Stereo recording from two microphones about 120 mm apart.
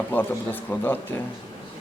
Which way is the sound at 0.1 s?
15° left (ahead or behind).